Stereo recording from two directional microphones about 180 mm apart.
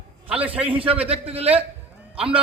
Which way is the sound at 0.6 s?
5° right (ahead or behind).